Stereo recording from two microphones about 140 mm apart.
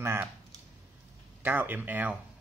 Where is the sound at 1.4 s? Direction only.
15° right (ahead or behind).